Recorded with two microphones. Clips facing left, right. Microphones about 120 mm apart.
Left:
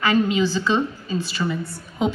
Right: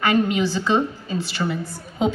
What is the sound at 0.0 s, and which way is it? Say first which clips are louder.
Speech: even; 55° right (ahead or behind).